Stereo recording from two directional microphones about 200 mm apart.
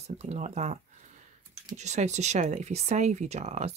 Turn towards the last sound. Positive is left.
turn(degrees=-35)  # may be behind; listen again after turning